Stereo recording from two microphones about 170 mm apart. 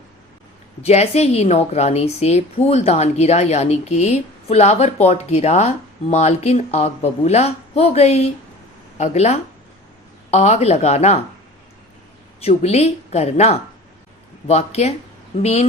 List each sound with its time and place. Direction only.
0.8 s speech: 40° left (ahead or behind)
12.4 s speech: 40° left (ahead or behind)